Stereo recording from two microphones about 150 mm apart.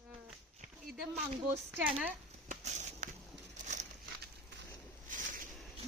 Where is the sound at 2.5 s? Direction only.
50° right (ahead or behind).